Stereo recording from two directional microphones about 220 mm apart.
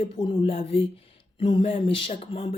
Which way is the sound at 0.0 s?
25° left (ahead or behind).